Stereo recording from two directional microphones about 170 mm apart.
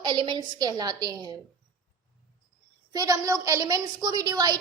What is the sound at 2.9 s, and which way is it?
A woman's voice, 20° right (ahead or behind).